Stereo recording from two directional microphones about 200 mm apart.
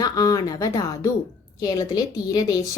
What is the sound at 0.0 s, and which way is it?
A woman's voice, 15° left (ahead or behind).